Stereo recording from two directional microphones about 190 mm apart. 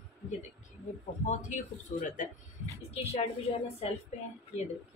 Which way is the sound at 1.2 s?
35° left (ahead or behind).